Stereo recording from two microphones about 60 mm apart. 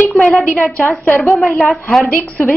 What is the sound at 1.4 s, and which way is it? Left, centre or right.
Speech, centre.